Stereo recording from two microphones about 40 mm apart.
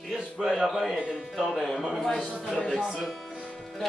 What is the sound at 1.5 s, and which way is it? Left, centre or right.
Speech, centre.